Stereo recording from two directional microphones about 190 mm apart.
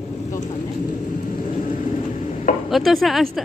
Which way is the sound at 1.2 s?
45° left (ahead or behind).